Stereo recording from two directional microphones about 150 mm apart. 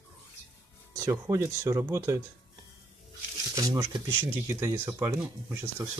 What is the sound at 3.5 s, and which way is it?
Speech, 25° right (ahead or behind).